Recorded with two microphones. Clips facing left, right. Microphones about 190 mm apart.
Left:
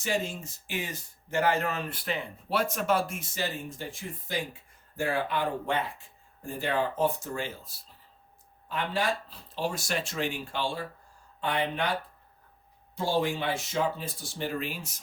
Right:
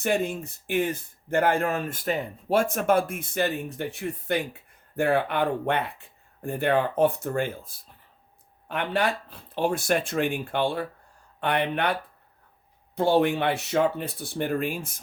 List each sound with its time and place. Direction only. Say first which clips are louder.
0.0 s speech: right 5 dB; 55° right (ahead or behind)
8.7 s speech: right 4 dB; 65° right (ahead or behind)
13.0 s speech: right 7 dB; 60° right (ahead or behind)